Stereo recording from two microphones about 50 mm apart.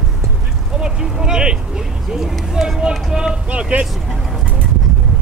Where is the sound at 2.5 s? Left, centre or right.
Centre.